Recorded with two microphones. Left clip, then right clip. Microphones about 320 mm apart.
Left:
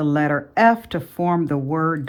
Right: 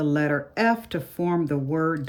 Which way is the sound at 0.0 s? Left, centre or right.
Centre.